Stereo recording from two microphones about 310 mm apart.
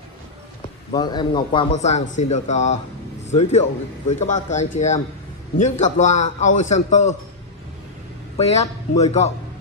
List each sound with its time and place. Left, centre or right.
0.9 s a man's voice: centre
8.4 s a man's voice: centre